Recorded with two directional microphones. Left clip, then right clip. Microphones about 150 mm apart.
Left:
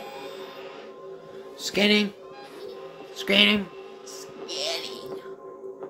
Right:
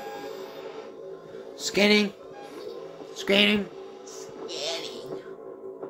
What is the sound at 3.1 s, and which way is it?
Speech, 15° left (ahead or behind).